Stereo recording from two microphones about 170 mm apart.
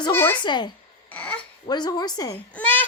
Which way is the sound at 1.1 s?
10° left (ahead or behind).